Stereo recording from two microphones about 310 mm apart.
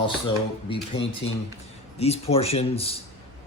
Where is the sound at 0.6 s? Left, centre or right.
Centre.